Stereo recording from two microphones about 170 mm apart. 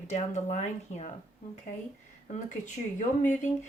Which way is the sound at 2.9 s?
45° left (ahead or behind).